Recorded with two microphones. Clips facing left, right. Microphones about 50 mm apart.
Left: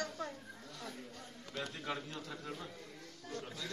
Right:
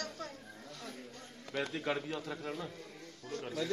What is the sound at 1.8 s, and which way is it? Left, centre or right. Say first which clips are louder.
Speech: right 5 dB; right.